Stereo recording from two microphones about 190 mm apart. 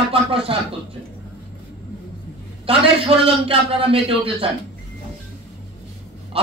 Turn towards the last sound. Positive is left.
turn(degrees=-30)  # may be behind; listen again after turning